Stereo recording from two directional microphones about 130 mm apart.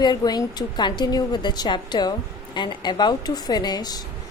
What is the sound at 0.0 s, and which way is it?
A woman's voice, 30° left (ahead or behind).